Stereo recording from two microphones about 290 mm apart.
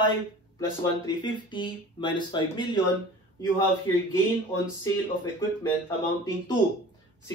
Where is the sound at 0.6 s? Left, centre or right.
Centre.